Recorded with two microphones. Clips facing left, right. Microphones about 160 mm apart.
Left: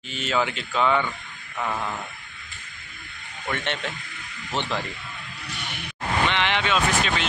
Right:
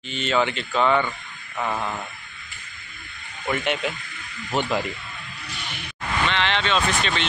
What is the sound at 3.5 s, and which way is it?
Speech, 10° right (ahead or behind).